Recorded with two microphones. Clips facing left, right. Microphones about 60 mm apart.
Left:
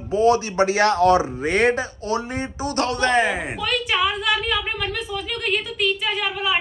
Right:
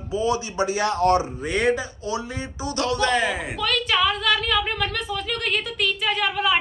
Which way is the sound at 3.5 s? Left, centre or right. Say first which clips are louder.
Even; centre.